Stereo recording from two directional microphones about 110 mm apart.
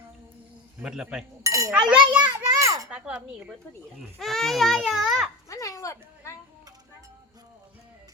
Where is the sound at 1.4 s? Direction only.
30° right (ahead or behind).